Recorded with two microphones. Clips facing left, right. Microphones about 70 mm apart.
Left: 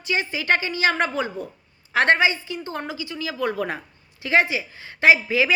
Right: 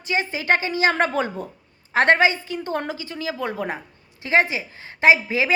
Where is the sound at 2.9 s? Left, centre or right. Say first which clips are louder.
Right 1 dB; right.